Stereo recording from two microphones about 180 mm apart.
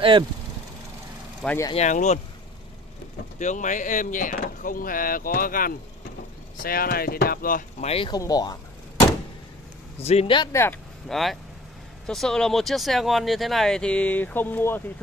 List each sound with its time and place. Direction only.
1.7 s a man's voice: 40° left (ahead or behind)
3.3 s speech: 45° left (ahead or behind)
7.8 s a man's voice: 35° left (ahead or behind)
8.1 s speech: 20° left (ahead or behind)
9.9 s a man's voice: 35° left (ahead or behind)
10.5 s speech: 15° left (ahead or behind)
11.1 s speech: centre (ahead or behind)